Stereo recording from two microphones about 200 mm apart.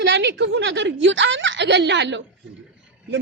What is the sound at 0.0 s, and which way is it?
A man's voice, 65° right (ahead or behind).